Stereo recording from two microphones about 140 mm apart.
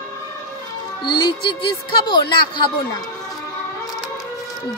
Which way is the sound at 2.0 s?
35° left (ahead or behind).